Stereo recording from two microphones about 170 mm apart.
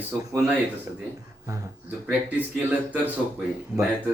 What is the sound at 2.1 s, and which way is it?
Speech, 10° right (ahead or behind).